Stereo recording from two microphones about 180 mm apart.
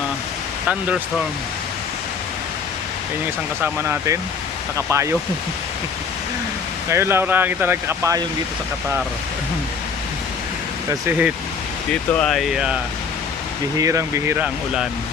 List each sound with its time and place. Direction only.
3.6 s speech: 15° right (ahead or behind)
6.9 s speech: 15° right (ahead or behind)
10.8 s speech: 10° right (ahead or behind)
12.1 s speech: centre (ahead or behind)
13.7 s speech: 15° right (ahead or behind)